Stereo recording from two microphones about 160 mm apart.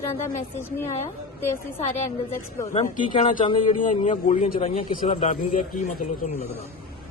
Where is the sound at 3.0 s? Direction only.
35° left (ahead or behind).